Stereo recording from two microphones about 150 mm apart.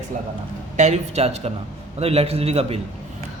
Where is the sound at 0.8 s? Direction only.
45° right (ahead or behind).